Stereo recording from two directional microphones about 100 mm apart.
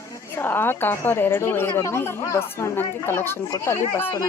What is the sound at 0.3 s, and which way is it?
A woman's voice, 20° left (ahead or behind).